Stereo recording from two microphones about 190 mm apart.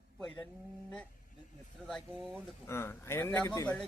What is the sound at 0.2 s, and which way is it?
Speech, 5° left (ahead or behind).